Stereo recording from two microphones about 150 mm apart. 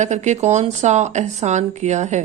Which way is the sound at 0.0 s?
50° right (ahead or behind).